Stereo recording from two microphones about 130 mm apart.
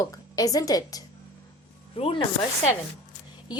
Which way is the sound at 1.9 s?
45° left (ahead or behind).